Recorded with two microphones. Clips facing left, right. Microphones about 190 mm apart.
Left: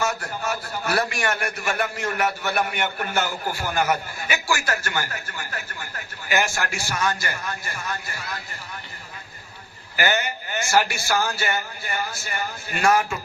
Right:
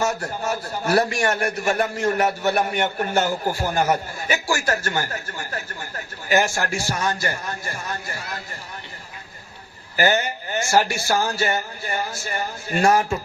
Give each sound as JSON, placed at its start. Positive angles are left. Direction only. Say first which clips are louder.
{"t": 0.0, "sound": "a man's voice", "louder": "right 2 dB", "side_deg": -30}
{"t": 0.9, "sound": "a man's voice", "louder": "right 5 dB", "side_deg": -40}
{"t": 6.7, "sound": "a man's voice", "louder": "right 1 dB", "side_deg": -45}
{"t": 10.1, "sound": "speech", "louder": "right 3 dB", "side_deg": -30}
{"t": 10.8, "sound": "speech", "louder": "right 2 dB", "side_deg": -45}
{"t": 11.3, "sound": "a man's voice", "louder": "right 3 dB", "side_deg": -30}